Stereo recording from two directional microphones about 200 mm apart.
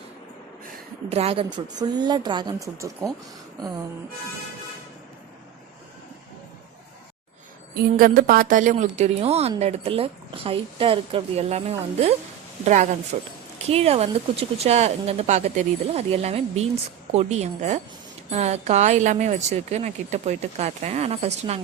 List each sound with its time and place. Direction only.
1.1 s a woman's voice: 30° right (ahead or behind)
7.8 s a woman's voice: 45° right (ahead or behind)